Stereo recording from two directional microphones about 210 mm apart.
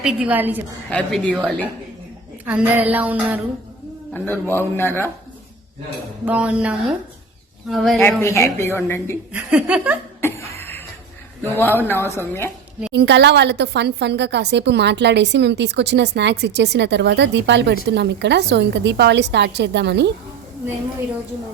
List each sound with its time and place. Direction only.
0.0 s a sound: 5° right (ahead or behind)
0.9 s a man's voice: 5° left (ahead or behind)
2.4 s a sound: 5° right (ahead or behind)
4.1 s a man's voice: 10° left (ahead or behind)
6.2 s speech: 5° right (ahead or behind)
8.2 s a man's voice: 10° left (ahead or behind)
9.3 s a sound: 5° right (ahead or behind)
10.2 s cough: 10° left (ahead or behind)
11.5 s a man's voice: 10° left (ahead or behind)
12.9 s a woman's voice: 55° right (ahead or behind)